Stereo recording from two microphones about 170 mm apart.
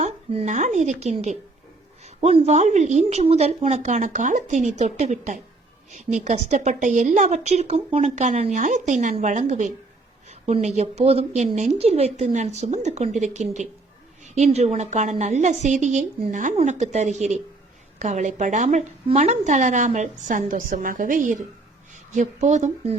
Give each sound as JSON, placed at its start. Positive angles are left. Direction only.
{"t": 0.0, "sound": "a woman's voice", "side_deg": -45}